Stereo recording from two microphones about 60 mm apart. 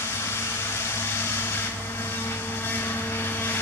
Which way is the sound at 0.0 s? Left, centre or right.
Left.